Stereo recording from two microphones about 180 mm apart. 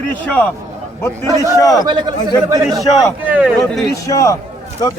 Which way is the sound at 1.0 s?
15° left (ahead or behind).